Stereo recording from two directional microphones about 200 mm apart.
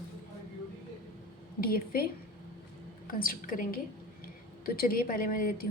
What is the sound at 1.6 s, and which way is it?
Speech, 45° left (ahead or behind).